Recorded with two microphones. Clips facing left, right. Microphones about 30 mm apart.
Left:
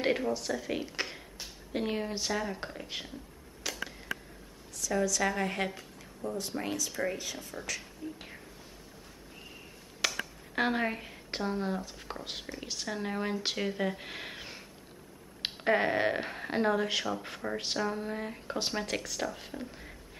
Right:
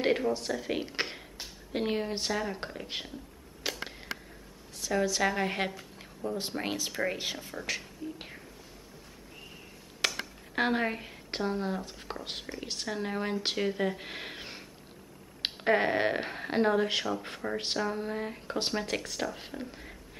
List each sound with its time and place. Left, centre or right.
0.0 s speech: centre
3.6 s a sound: right
4.7 s a woman's voice: right
6.3 s speech: right
10.0 s a sound: centre
10.5 s speech: centre